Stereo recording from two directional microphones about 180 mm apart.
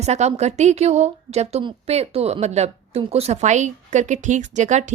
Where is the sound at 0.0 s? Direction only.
40° right (ahead or behind).